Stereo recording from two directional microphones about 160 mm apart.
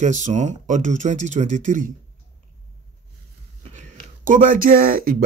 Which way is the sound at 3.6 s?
45° right (ahead or behind).